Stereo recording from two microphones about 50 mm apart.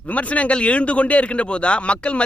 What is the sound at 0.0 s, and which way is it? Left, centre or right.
A man's voice, left.